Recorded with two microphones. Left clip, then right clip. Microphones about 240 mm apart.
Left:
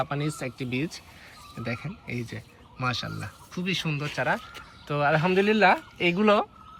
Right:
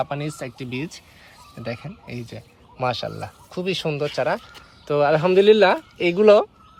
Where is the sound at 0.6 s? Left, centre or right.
Centre.